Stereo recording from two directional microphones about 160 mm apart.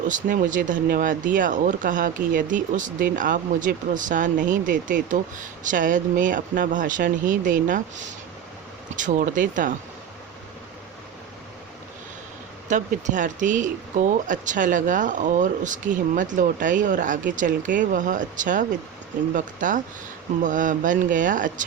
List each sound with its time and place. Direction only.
0.1 s speech: 55° right (ahead or behind)
9.0 s speech: 50° right (ahead or behind)
12.6 s speech: 50° right (ahead or behind)